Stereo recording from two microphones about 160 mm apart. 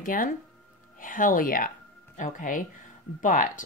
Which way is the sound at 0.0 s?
60° left (ahead or behind).